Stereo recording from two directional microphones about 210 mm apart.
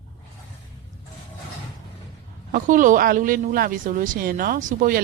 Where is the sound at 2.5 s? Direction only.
40° right (ahead or behind).